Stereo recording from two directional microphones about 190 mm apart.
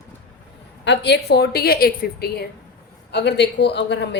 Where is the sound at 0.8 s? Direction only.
65° left (ahead or behind).